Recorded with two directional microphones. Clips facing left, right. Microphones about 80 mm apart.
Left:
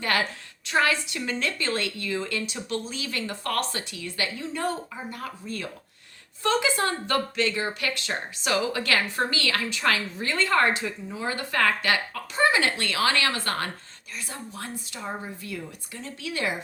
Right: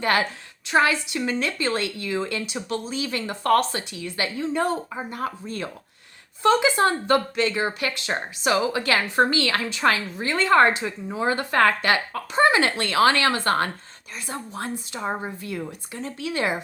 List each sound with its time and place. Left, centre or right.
0.0 s a woman's voice: right